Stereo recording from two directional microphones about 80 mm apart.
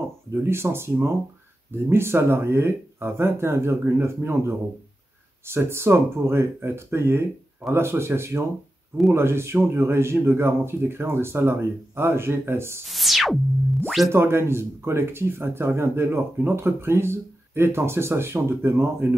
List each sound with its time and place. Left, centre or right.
0.3 s speech: right
12.8 s music: centre
14.1 s speech: right